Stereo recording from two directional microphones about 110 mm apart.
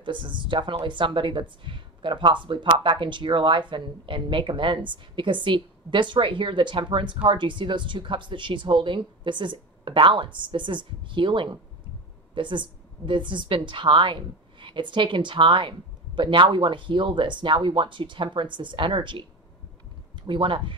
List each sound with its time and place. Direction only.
0.0 s a woman's voice: 45° right (ahead or behind)
20.2 s a woman's voice: 50° right (ahead or behind)